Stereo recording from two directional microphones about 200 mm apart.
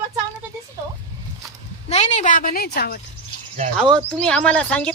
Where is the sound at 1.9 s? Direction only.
35° left (ahead or behind); by 3.0 s 50° left (ahead or behind).